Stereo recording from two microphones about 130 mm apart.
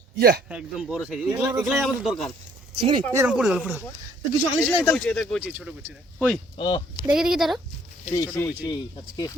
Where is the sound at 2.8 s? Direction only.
35° right (ahead or behind).